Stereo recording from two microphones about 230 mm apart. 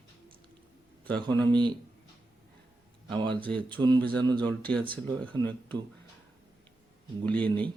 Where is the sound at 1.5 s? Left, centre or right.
Centre.